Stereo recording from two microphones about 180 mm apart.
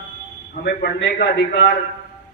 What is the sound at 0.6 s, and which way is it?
Speech, 65° left (ahead or behind).